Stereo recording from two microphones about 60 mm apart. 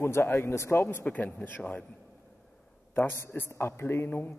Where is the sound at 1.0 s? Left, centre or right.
Left.